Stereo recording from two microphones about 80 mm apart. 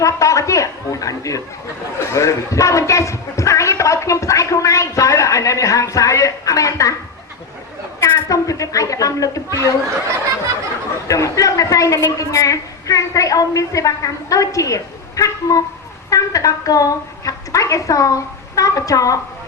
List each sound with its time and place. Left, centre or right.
0.0 s a woman's voice: left
8.0 s a woman's voice: left
11.1 s a woman's voice: left